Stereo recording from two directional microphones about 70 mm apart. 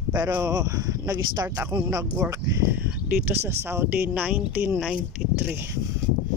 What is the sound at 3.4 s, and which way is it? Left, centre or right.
Speech, right.